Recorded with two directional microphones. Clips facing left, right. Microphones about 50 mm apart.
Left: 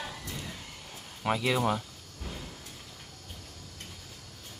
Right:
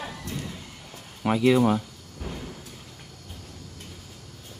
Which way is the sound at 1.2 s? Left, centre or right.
Centre.